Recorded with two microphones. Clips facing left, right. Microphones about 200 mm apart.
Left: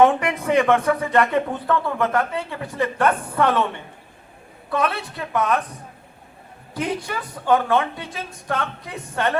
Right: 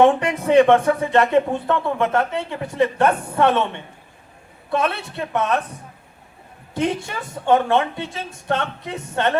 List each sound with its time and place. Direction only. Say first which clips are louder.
0.0 s speech: right 1 dB; 30° right (ahead or behind)
4.7 s speech: right 1 dB; 25° right (ahead or behind)
6.7 s speech: right 3 dB; 25° right (ahead or behind)